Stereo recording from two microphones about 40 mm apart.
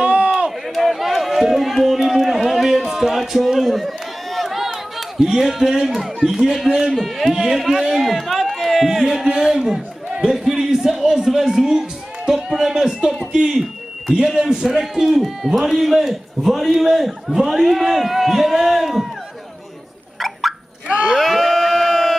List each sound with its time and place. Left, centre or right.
0.0 s run: right
0.7 s run: centre
6.1 s a man's voice: centre
10.3 s a sound: centre
11.1 s a man's voice: centre
13.5 s a sound: centre
14.2 s a man's voice: centre
20.2 s a sound: centre
21.1 s crowd: centre